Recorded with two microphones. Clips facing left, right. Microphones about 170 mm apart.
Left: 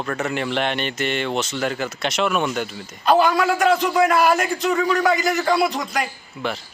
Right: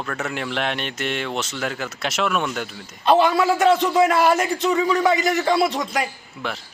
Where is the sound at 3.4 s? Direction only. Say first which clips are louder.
Right 1 dB; 25° right (ahead or behind).